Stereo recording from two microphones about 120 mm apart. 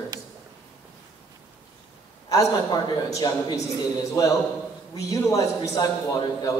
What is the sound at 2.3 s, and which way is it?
A man's voice, 30° left (ahead or behind).